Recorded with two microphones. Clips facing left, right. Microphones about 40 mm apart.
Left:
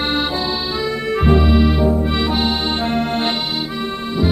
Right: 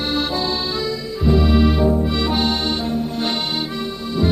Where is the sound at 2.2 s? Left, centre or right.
Centre.